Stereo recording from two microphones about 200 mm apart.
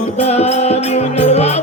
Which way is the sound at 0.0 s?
30° left (ahead or behind).